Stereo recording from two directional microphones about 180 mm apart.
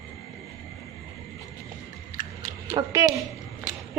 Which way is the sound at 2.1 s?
20° right (ahead or behind).